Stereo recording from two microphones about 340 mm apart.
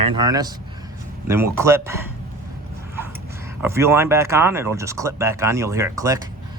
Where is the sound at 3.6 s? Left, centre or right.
Centre.